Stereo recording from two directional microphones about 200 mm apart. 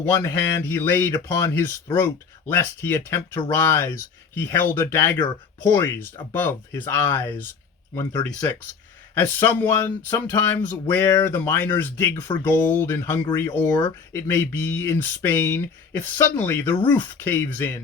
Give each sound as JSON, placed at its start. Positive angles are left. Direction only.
{"t": 0.3, "sound": "speech", "side_deg": 10}